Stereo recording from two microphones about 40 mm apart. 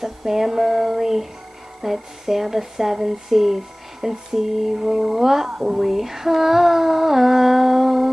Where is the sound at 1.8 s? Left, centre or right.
Centre.